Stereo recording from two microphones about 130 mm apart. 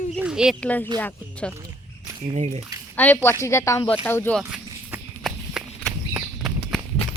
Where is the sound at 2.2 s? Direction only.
55° right (ahead or behind).